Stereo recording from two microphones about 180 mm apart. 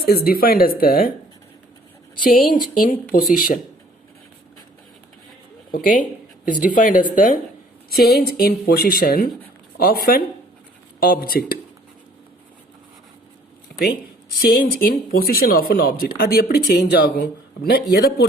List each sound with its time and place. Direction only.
0.0 s speech: 60° left (ahead or behind)
2.2 s speech: 50° left (ahead or behind)
5.7 s speech: 45° left (ahead or behind)
7.9 s speech: 60° left (ahead or behind)
14.6 s speech: 55° left (ahead or behind)